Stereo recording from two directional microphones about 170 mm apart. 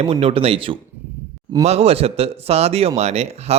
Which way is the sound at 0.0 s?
35° right (ahead or behind).